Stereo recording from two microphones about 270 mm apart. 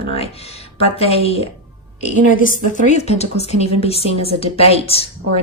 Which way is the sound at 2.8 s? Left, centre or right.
Left.